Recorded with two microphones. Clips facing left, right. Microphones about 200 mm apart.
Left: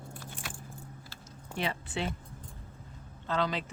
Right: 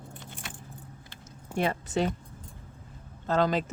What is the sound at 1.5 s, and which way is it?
Speech, 45° right (ahead or behind).